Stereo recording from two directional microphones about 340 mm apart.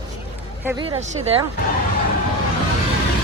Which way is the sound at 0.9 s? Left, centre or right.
Centre.